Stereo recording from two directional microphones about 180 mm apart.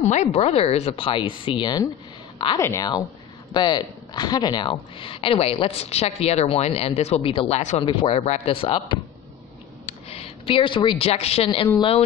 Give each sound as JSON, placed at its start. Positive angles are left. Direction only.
{"t": 0.0, "sound": "a woman's voice", "side_deg": 40}